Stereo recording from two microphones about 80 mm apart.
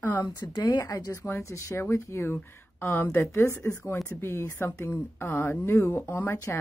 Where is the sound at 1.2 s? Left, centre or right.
Left.